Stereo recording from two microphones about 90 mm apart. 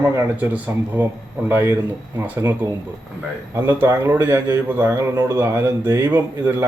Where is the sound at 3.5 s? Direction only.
25° right (ahead or behind).